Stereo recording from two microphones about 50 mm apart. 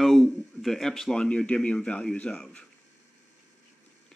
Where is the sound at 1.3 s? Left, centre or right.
Left.